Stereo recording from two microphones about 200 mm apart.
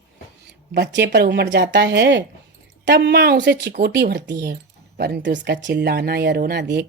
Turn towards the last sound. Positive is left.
turn(degrees=-60)  # may be behind; listen again after turning